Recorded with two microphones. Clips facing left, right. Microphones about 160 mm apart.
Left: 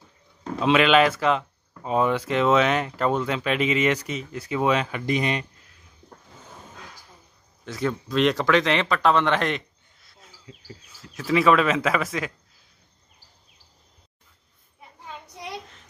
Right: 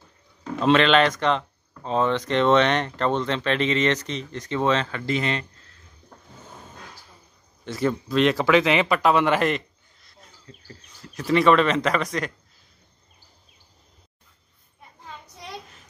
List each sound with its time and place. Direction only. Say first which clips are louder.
0.6 s speech: even; 5° left (ahead or behind)
7.6 s speech: right 3 dB; centre (ahead or behind)
10.0 s a sound: left 1 dB; 5° left (ahead or behind)
10.5 s speech: left 2 dB; 10° left (ahead or behind)